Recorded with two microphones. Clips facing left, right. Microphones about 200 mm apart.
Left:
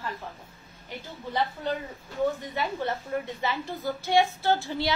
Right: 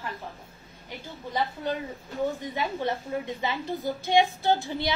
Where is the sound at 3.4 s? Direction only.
15° right (ahead or behind).